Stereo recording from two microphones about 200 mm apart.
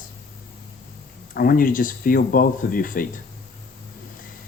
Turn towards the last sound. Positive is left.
turn(degrees=45)  # may be behind; listen again after turning